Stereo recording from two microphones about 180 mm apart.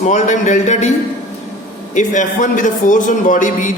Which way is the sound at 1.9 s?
45° left (ahead or behind).